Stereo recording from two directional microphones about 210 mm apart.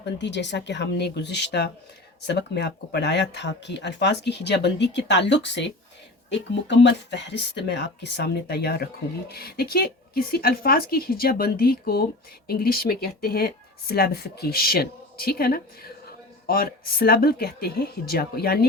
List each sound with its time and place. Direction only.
0.0 s speech: 55° left (ahead or behind)